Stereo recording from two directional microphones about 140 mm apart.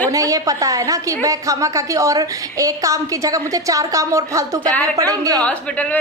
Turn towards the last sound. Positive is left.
turn(degrees=10)  # may be behind; listen again after turning